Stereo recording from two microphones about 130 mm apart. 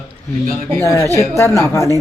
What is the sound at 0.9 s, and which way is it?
A woman's voice, 20° left (ahead or behind).